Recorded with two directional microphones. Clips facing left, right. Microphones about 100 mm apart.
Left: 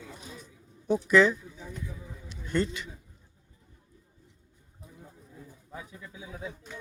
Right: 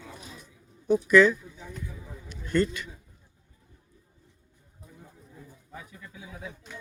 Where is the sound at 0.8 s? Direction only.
25° left (ahead or behind).